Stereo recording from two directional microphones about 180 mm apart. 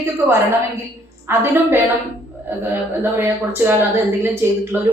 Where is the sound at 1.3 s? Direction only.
10° right (ahead or behind).